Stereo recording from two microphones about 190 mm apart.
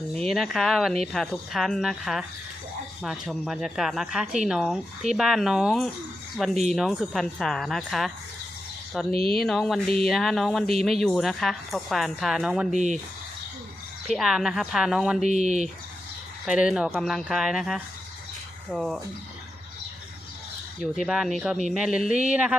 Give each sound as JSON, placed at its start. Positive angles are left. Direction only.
{"t": 0.1, "sound": "speech", "side_deg": 0}
{"t": 12.7, "sound": "speech", "side_deg": -40}
{"t": 14.1, "sound": "speech", "side_deg": 0}
{"t": 15.2, "sound": "speech", "side_deg": -35}
{"t": 16.5, "sound": "speech", "side_deg": -5}
{"t": 20.8, "sound": "speech", "side_deg": -5}